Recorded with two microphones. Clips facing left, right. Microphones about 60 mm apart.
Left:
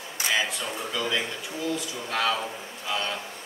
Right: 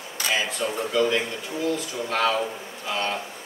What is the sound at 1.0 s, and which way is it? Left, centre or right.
Speech, right.